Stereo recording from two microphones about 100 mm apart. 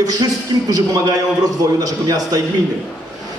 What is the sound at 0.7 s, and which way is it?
A man's voice, 35° right (ahead or behind).